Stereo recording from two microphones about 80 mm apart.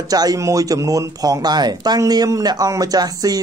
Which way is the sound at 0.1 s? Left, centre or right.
Right.